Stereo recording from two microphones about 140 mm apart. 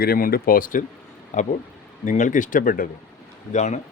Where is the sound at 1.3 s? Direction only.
55° left (ahead or behind); by 2.8 s 85° left.